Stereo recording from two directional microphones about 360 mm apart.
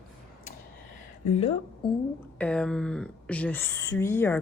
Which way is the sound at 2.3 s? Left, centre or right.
Centre.